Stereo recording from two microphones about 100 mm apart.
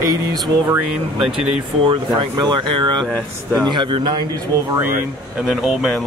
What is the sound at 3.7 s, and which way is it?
Speech, 50° right (ahead or behind).